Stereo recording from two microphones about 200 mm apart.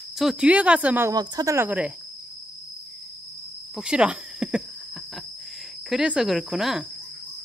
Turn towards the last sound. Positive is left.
turn(degrees=0)  # may be behind; listen again after turning